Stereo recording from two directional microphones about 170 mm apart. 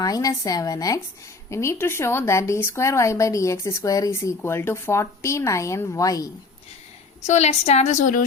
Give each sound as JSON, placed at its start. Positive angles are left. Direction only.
{"t": 0.0, "sound": "a woman's voice", "side_deg": 20}
{"t": 7.3, "sound": "a woman's voice", "side_deg": 40}